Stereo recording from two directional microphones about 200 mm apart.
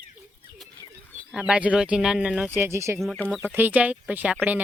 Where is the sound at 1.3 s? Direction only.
5° right (ahead or behind).